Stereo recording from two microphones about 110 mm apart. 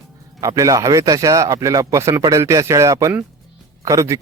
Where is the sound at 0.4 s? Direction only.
30° right (ahead or behind).